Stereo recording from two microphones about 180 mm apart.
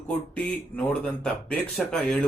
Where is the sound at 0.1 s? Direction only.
5° left (ahead or behind).